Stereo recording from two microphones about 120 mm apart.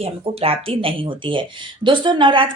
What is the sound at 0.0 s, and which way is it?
A woman's voice, 55° right (ahead or behind).